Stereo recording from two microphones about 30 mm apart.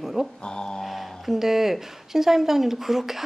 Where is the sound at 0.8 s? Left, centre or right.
Centre.